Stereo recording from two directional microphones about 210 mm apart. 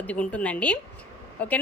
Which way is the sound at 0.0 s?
5° left (ahead or behind).